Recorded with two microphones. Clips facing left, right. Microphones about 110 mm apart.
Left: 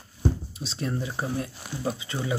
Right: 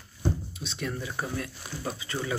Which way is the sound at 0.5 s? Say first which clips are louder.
Left 4 dB; 30° left (ahead or behind).